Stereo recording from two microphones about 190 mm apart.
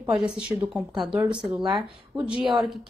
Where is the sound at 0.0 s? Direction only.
5° right (ahead or behind).